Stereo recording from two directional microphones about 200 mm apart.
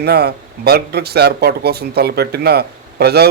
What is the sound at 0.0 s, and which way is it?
Speech, 55° right (ahead or behind).